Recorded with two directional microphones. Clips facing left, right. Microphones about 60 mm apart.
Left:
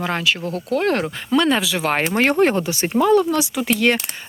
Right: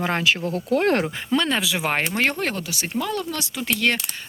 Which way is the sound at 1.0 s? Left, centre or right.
Centre.